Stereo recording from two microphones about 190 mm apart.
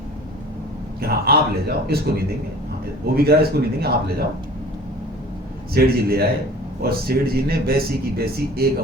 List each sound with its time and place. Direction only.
1.0 s speech: 55° right (ahead or behind)
5.7 s speech: 55° right (ahead or behind)